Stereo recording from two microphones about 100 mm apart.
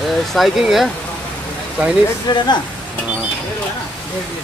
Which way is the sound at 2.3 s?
45° left (ahead or behind).